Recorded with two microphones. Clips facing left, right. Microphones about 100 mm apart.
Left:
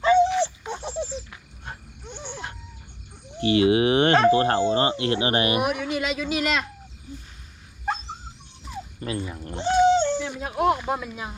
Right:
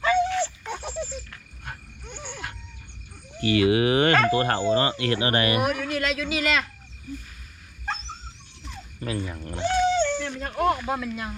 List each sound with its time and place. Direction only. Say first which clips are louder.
0.0 s dog: left 4 dB; 20° left (ahead or behind)
3.3 s speech: left 2 dB; 25° left (ahead or behind)
5.5 s speech: even; 5° left (ahead or behind)
7.9 s dog: left 4 dB; 5° left (ahead or behind)
9.1 s speech: even; 5° left (ahead or behind)
9.5 s speech: left 4 dB; 20° left (ahead or behind)